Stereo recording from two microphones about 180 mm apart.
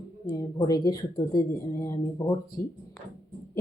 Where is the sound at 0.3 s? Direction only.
25° left (ahead or behind).